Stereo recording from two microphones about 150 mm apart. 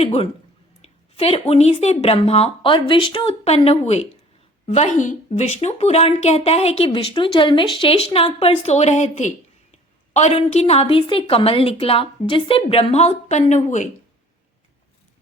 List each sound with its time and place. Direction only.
0.0 s a woman's voice: 40° left (ahead or behind)